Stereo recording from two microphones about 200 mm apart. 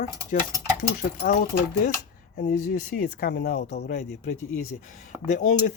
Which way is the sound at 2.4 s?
40° left (ahead or behind).